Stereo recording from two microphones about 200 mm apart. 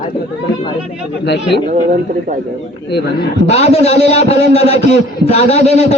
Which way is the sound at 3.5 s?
30° left (ahead or behind).